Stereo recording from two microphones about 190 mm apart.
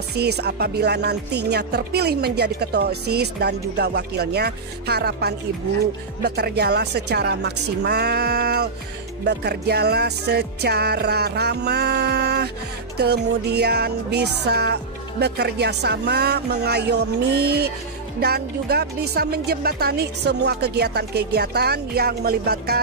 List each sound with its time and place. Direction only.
0.1 s speech: 60° right (ahead or behind)